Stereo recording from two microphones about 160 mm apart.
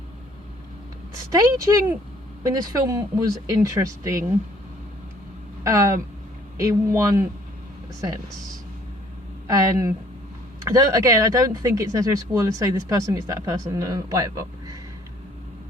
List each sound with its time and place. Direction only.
1.1 s a woman's voice: 20° right (ahead or behind)
5.6 s speech: 20° right (ahead or behind)
9.5 s speech: 20° right (ahead or behind)